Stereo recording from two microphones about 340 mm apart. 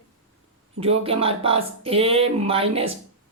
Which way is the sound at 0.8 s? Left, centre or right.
Centre.